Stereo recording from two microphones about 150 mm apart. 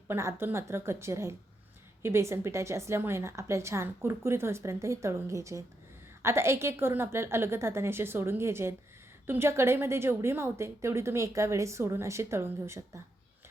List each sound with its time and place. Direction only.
0.1 s a woman's voice: 15° right (ahead or behind)